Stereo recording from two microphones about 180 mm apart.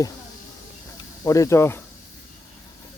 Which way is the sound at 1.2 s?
15° left (ahead or behind).